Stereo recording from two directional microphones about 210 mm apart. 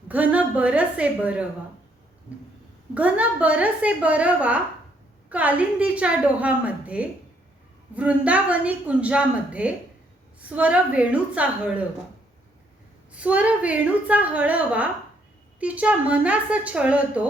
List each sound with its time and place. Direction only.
0.1 s a woman's voice: 5° right (ahead or behind)
2.9 s a woman's voice: 5° right (ahead or behind)
13.1 s a woman's voice: 5° right (ahead or behind)